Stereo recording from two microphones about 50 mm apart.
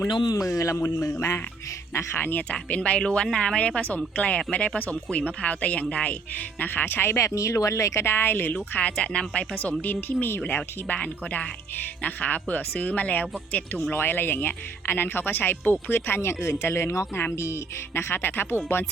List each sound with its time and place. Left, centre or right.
0.4 s speech: left
0.9 s speech: left
2.1 s speech: left
2.5 s speech: left
6.6 s speech: left
7.2 s speech: left
8.0 s speech: left
9.0 s speech: left
9.8 s speech: left
10.4 s speech: left
13.9 s speech: left
17.3 s speech: left